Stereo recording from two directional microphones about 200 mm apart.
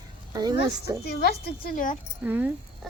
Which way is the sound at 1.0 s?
55° left (ahead or behind).